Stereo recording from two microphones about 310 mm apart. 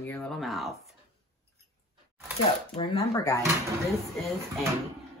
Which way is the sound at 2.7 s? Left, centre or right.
Centre.